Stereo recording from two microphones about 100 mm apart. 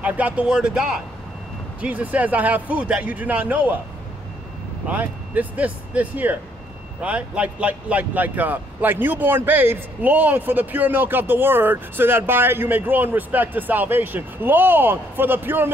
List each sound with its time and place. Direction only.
0.0 s speech: 15° right (ahead or behind)
4.8 s speech: 15° right (ahead or behind)